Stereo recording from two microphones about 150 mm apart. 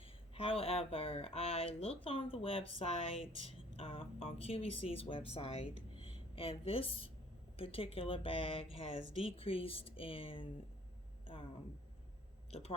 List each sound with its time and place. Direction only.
0.0 s speech: 35° left (ahead or behind)
12.5 s speech: 45° left (ahead or behind)